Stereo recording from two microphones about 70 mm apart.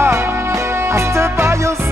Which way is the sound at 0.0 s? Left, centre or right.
Right.